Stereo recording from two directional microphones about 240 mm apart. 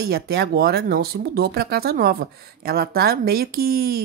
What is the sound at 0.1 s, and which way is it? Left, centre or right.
Speech, right.